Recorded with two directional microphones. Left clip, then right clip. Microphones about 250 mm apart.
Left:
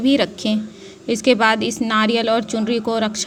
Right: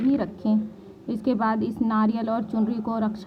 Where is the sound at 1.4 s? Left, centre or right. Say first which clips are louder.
Left 8 dB; centre.